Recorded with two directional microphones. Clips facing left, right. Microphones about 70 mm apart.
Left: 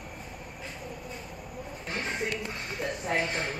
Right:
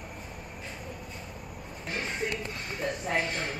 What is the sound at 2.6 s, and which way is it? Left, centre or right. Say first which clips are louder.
Speech: even; centre.